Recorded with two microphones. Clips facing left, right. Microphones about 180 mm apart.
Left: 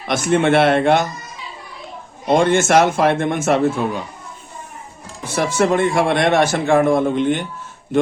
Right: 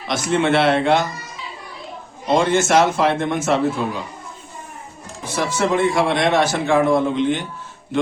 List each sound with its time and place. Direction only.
0.1 s a man's voice: 55° left (ahead or behind)
2.2 s a man's voice: 50° left (ahead or behind)
5.3 s a man's voice: 55° left (ahead or behind)